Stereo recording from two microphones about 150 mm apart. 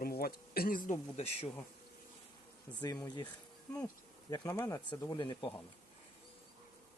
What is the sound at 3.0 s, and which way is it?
Speech, 30° left (ahead or behind).